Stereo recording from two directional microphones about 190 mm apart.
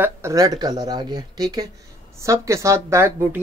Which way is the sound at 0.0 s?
15° right (ahead or behind).